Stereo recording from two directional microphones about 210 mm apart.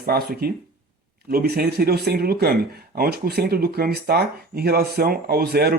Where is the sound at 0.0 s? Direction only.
45° right (ahead or behind).